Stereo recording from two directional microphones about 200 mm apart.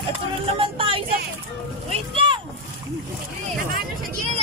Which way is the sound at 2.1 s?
25° right (ahead or behind).